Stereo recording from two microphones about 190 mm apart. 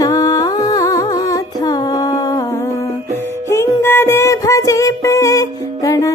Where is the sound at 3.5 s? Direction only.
15° left (ahead or behind).